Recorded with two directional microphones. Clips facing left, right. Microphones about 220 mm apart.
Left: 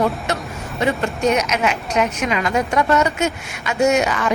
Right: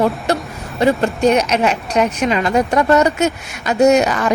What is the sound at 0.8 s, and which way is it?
A woman's voice, 35° right (ahead or behind).